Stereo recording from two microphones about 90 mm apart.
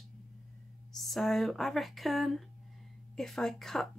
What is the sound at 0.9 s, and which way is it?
Speech, centre (ahead or behind).